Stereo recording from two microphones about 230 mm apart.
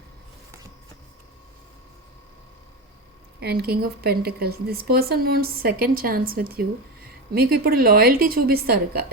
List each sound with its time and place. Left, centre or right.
3.4 s a woman's voice: right